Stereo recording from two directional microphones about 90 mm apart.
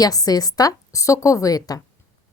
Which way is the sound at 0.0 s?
45° left (ahead or behind).